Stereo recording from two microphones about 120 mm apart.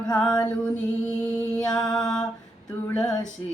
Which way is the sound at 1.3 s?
15° left (ahead or behind).